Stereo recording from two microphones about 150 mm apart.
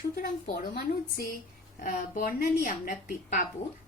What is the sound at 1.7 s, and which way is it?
A woman's voice, 60° left (ahead or behind).